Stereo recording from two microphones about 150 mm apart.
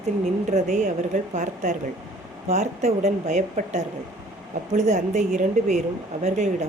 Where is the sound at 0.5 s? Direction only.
50° right (ahead or behind).